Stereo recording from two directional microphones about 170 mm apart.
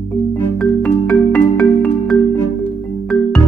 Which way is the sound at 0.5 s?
5° left (ahead or behind).